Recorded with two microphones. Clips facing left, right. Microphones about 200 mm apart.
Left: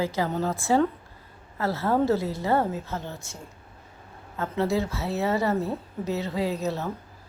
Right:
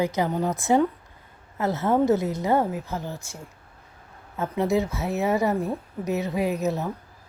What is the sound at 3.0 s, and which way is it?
Speech, 20° left (ahead or behind).